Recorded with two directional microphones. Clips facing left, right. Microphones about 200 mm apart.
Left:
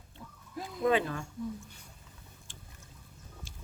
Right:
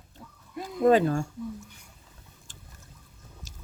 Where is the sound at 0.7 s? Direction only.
50° right (ahead or behind).